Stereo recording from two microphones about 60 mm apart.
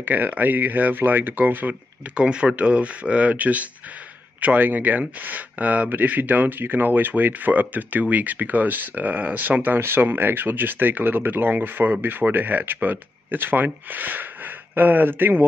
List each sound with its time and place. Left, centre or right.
0.0 s speech: right